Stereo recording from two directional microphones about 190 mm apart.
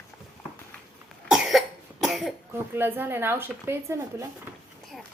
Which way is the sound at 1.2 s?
Centre (ahead or behind).